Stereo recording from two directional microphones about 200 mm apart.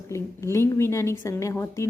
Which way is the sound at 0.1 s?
15° left (ahead or behind).